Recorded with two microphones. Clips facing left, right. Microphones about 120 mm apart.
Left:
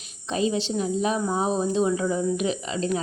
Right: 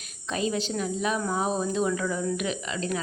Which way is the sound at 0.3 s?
30° left (ahead or behind).